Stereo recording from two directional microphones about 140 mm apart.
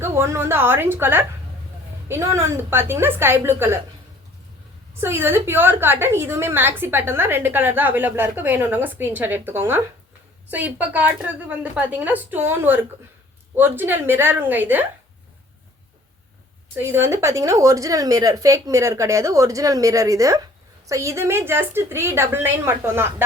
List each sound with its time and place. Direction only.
0.0 s a woman's voice: 15° right (ahead or behind)
4.9 s a woman's voice: 15° right (ahead or behind)
16.7 s a woman's voice: 15° right (ahead or behind)